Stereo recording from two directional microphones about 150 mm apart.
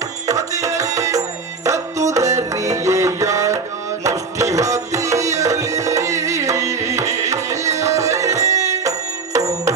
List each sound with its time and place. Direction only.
0.3 s music: 20° right (ahead or behind)